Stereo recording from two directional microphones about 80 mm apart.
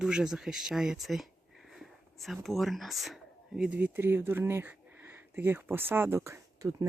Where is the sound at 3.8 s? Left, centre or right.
Right.